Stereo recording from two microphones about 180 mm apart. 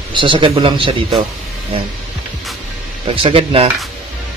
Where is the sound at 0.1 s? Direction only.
25° right (ahead or behind).